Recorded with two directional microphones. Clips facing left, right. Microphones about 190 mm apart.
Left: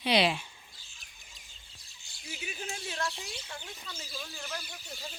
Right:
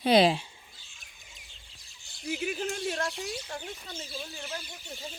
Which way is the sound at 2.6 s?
60° right (ahead or behind).